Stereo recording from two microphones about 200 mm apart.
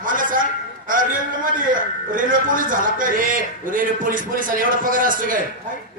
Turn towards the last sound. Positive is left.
turn(degrees=-45)  # may be behind; listen again after turning